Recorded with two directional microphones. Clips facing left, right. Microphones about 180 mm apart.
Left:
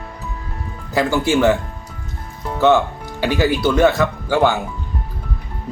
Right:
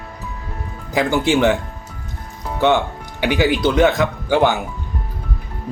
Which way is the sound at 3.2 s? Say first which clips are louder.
Even; 15° right (ahead or behind).